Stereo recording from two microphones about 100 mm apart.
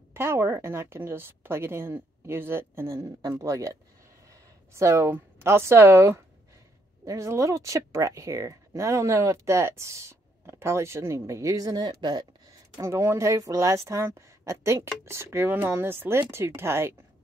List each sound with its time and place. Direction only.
0.1 s a woman's voice: 25° right (ahead or behind)
3.2 s speech: 35° right (ahead or behind)
4.7 s a woman's voice: 25° right (ahead or behind); by 12.3 s 45° right (ahead or behind)
12.7 s a woman's voice: 30° right (ahead or behind)